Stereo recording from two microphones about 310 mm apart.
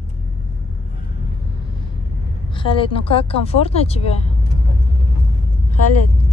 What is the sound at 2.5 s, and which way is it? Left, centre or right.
A woman's voice, centre.